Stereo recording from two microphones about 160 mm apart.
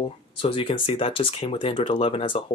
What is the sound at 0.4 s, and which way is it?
Speech, 35° left (ahead or behind).